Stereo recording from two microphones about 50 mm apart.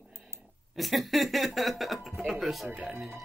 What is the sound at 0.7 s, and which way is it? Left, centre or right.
Speech, centre.